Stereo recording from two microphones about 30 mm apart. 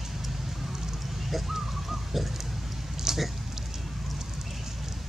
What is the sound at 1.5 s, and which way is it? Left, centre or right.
Bird, centre.